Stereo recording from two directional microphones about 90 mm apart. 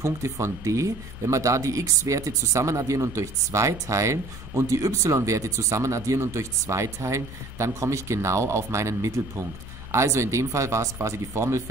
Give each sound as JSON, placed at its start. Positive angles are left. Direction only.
{"t": 0.0, "sound": "speech", "side_deg": -35}